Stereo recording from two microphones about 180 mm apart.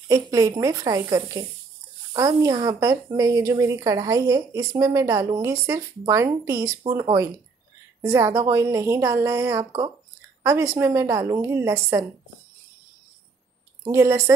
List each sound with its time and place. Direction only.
0.1 s a woman's voice: 20° right (ahead or behind)
9.7 s speech: 30° right (ahead or behind)
10.4 s a woman's voice: 15° right (ahead or behind)
13.8 s a woman's voice: 15° right (ahead or behind)